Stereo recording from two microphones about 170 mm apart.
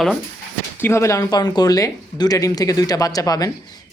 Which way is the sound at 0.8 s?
15° left (ahead or behind).